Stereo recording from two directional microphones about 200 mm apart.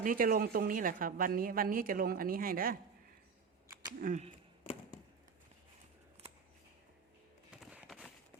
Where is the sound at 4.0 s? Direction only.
40° right (ahead or behind).